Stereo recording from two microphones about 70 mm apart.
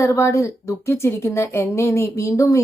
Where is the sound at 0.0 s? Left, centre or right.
Left.